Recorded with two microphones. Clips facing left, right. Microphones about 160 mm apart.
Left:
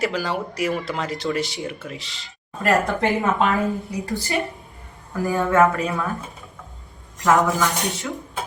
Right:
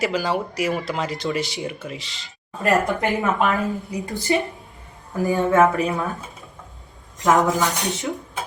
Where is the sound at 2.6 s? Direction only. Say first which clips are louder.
Even; 20° right (ahead or behind).